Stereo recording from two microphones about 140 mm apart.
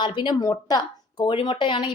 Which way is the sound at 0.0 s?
30° left (ahead or behind).